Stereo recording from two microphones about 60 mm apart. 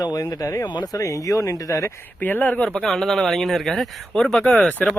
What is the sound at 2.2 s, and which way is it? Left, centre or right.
Speech, left.